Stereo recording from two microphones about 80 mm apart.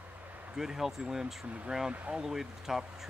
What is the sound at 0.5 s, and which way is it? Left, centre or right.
Speech, centre.